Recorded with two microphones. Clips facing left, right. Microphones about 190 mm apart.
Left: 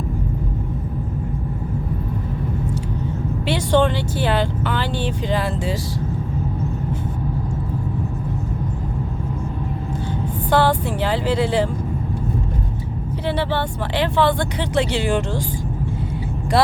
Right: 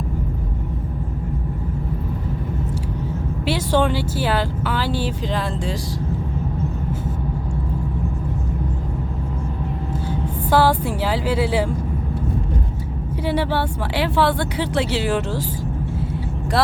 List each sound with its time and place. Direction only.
3.4 s speech: 5° right (ahead or behind)
10.5 s speech: 10° right (ahead or behind)
13.2 s speech: 10° right (ahead or behind)